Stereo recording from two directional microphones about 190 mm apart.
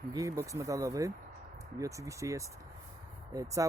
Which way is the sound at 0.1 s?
15° right (ahead or behind).